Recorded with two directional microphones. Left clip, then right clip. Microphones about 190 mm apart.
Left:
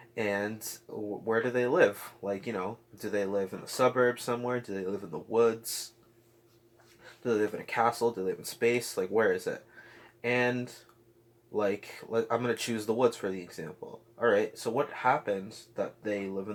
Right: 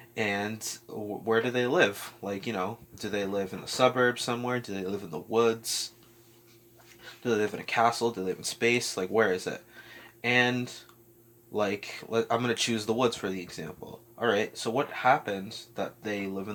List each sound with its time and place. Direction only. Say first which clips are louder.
0.1 s speech: right 1 dB; 35° right (ahead or behind)
7.2 s speech: right 1 dB; 35° right (ahead or behind)